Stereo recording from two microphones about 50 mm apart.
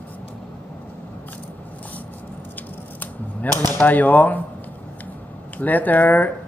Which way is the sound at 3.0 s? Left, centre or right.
Left.